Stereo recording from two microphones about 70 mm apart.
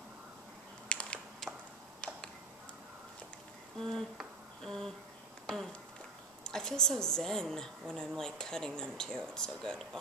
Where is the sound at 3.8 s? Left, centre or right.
Centre.